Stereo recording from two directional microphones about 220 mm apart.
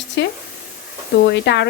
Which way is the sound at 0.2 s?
55° left (ahead or behind).